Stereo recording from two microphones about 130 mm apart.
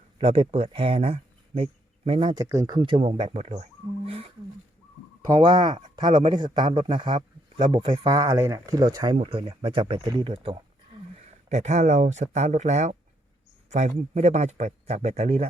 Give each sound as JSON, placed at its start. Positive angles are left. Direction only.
{"t": 0.2, "sound": "speech", "side_deg": -50}
{"t": 2.3, "sound": "speech", "side_deg": -25}
{"t": 5.4, "sound": "speech", "side_deg": -35}
{"t": 9.1, "sound": "speech", "side_deg": -45}
{"t": 11.4, "sound": "speech", "side_deg": -60}